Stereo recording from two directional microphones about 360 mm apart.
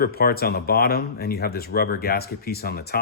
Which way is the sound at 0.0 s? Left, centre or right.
Left.